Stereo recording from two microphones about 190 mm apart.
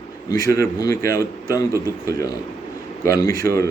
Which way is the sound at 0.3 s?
20° left (ahead or behind).